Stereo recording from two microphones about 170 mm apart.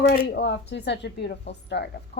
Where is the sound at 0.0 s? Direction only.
65° left (ahead or behind).